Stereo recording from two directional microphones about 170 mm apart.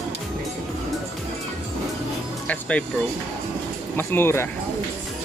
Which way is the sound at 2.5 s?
5° left (ahead or behind).